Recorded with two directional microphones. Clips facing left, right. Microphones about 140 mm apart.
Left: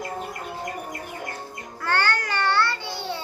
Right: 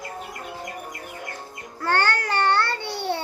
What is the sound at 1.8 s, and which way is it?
Music, 45° right (ahead or behind).